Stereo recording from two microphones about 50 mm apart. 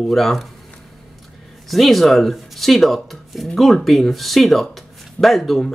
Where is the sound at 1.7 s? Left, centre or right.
Centre.